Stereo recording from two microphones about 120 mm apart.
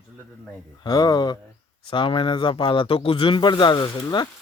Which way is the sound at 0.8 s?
30° left (ahead or behind).